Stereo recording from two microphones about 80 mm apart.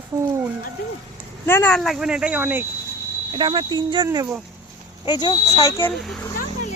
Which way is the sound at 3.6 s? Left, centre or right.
Right.